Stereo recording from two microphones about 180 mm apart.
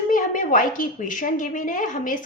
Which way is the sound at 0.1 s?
45° left (ahead or behind).